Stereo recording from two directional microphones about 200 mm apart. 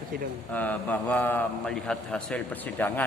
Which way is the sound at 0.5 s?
10° left (ahead or behind).